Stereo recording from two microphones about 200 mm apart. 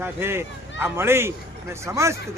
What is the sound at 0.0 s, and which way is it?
Speech, 10° right (ahead or behind).